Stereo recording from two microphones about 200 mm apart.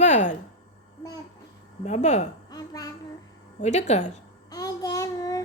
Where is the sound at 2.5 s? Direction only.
20° left (ahead or behind).